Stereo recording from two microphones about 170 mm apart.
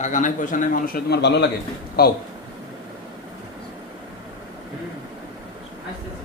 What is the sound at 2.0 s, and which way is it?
Speech, 65° left (ahead or behind).